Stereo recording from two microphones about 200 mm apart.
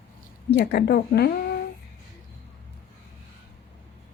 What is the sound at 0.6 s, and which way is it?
Speech, 55° left (ahead or behind).